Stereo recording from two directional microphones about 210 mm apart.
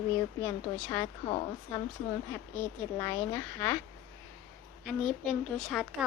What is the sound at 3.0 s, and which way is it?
Speech, 15° left (ahead or behind).